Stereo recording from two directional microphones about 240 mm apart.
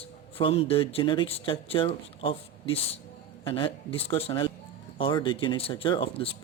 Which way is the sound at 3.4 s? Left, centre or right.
Left.